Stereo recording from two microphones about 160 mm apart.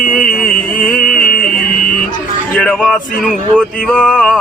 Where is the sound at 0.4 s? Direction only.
60° left (ahead or behind).